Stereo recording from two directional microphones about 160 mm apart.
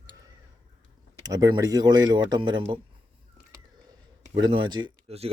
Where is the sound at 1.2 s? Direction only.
25° right (ahead or behind).